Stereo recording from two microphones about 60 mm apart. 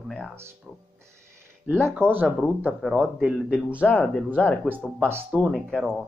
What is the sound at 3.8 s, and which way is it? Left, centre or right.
Speech, left.